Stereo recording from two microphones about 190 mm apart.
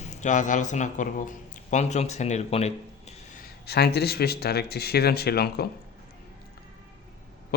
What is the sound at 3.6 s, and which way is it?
Speech, 60° left (ahead or behind).